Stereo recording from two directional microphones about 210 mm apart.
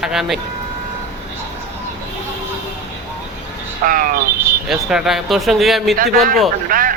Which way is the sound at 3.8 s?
40° right (ahead or behind).